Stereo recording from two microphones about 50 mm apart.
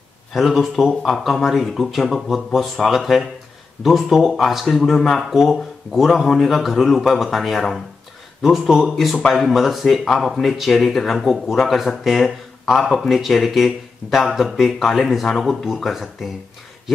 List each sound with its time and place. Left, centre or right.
0.3 s speech: centre
15.2 s speech: centre